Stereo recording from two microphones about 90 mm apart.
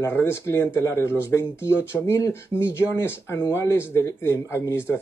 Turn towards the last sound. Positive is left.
turn(degrees=25)  # may be behind; listen again after turning